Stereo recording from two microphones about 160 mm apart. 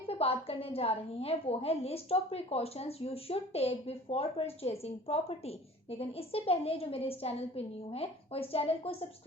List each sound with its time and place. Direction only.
0.1 s a woman's voice: 35° left (ahead or behind)